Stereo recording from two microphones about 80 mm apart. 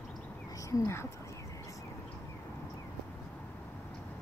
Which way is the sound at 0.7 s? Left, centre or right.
Left.